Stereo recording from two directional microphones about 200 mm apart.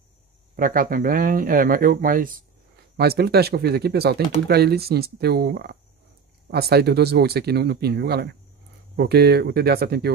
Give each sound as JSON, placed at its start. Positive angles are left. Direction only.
{"t": 0.6, "sound": "speech", "side_deg": -45}